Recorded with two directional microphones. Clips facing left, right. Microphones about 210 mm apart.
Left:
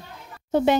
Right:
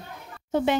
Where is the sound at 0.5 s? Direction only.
40° left (ahead or behind).